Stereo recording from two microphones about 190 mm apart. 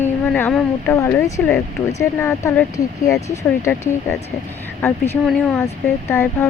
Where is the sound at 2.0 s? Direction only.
15° left (ahead or behind).